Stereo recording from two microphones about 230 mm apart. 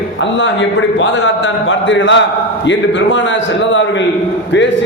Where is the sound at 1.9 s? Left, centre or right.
Left.